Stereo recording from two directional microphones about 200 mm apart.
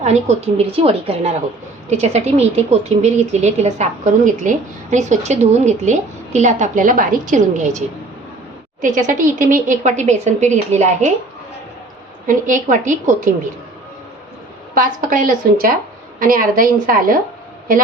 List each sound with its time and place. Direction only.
0.0 s speech: 35° right (ahead or behind)
8.8 s speech: 40° right (ahead or behind)
12.2 s speech: 40° right (ahead or behind)
14.8 s a woman's voice: 40° right (ahead or behind)